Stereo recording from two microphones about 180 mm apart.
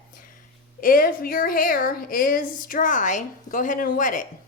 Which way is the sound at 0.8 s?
50° left (ahead or behind).